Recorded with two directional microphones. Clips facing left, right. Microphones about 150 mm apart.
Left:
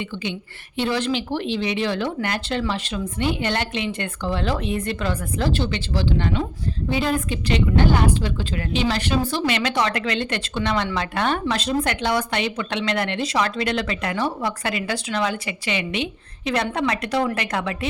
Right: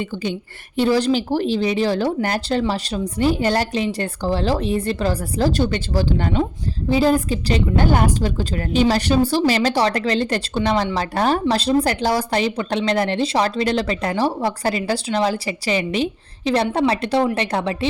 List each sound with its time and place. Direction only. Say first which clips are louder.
0.0 s speech: right 4 dB; 40° right (ahead or behind)